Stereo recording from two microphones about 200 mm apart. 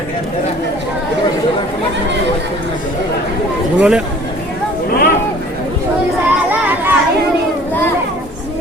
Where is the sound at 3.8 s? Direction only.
5° right (ahead or behind).